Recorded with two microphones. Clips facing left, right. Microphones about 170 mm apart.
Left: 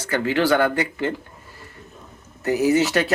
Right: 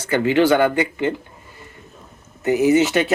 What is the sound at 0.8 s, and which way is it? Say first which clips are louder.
Speech: right 3 dB; centre (ahead or behind).